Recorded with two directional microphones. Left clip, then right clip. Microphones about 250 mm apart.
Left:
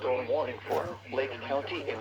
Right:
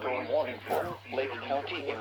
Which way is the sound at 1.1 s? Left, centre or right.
Centre.